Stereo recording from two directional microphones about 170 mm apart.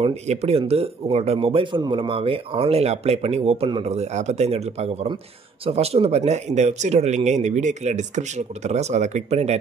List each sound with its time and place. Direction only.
0.0 s speech: 40° right (ahead or behind)